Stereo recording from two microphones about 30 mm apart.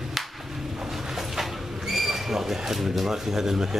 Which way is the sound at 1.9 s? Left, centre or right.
Centre.